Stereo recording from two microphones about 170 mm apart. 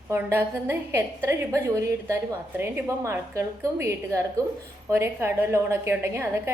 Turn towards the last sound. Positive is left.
turn(degrees=-15)  # may be behind; listen again after turning